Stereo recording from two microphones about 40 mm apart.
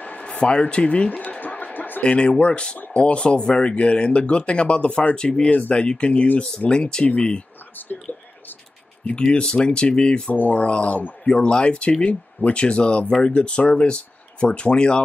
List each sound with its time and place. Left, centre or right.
0.0 s a sound: left
0.4 s speech: left
1.4 s a sound: left
2.0 s speech: left
2.8 s speech: left
9.1 s speech: left
10.3 s speech: left
10.6 s speech: left